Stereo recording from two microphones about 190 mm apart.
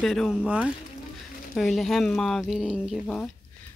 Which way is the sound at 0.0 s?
Centre (ahead or behind).